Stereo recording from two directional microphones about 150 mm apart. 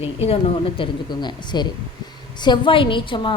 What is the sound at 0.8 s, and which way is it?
A woman's voice, 30° left (ahead or behind).